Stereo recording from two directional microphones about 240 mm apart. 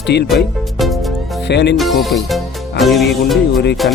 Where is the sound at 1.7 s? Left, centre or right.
Centre.